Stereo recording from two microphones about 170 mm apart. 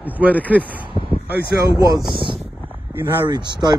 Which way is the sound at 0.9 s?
30° left (ahead or behind).